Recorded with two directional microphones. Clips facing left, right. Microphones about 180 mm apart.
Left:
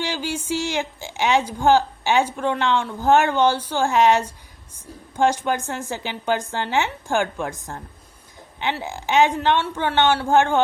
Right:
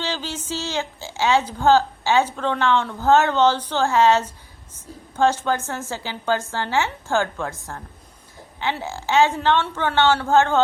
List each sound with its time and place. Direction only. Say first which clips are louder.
0.0 s a woman's voice: left 2 dB; 10° left (ahead or behind)
8.8 s a woman's voice: even; 15° left (ahead or behind)